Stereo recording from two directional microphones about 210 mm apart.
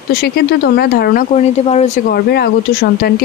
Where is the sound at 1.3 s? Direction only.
30° left (ahead or behind).